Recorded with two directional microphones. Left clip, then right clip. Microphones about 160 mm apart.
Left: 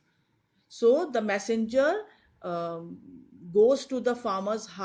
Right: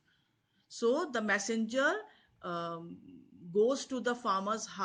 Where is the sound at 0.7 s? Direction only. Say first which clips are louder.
Left 8 dB; 30° right (ahead or behind).